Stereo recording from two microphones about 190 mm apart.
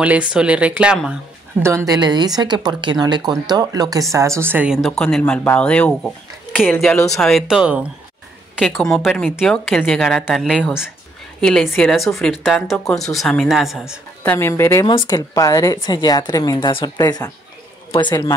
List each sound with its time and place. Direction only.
0.0 s speech: 5° right (ahead or behind)
14.2 s a woman's voice: 10° left (ahead or behind)